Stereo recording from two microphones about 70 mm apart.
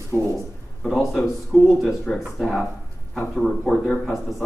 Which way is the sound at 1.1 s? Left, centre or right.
Centre.